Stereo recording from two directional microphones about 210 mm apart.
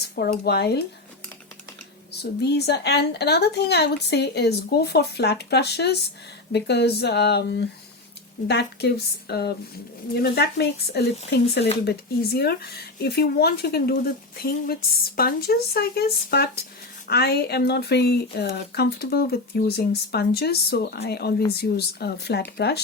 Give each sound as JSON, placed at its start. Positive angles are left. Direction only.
{"t": 0.0, "sound": "speech", "side_deg": 50}
{"t": 2.4, "sound": "speech", "side_deg": 50}